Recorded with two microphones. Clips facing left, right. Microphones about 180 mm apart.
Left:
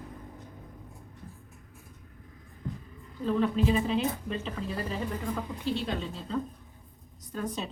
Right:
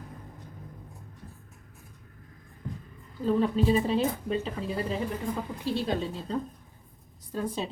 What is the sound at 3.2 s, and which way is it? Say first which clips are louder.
A woman's voice: right 2 dB; 35° right (ahead or behind).